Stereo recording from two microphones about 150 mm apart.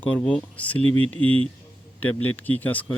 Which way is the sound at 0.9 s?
40° right (ahead or behind).